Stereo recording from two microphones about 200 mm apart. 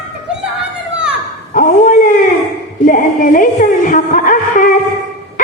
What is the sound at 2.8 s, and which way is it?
Music, 40° left (ahead or behind).